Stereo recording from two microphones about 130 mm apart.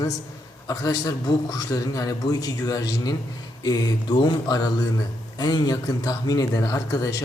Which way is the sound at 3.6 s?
30° left (ahead or behind).